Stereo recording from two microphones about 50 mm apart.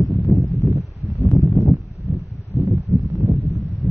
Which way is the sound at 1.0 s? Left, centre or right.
Right.